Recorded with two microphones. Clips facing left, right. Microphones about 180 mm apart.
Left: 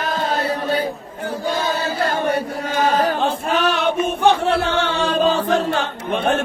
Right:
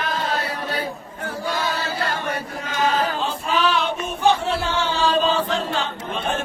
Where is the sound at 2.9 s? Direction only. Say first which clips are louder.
Left 5 dB; 55° left (ahead or behind).